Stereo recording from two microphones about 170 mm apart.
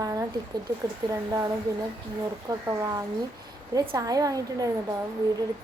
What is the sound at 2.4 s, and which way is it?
Speech, 20° right (ahead or behind).